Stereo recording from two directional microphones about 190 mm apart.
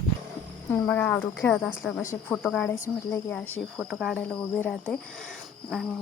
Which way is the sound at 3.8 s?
Centre (ahead or behind).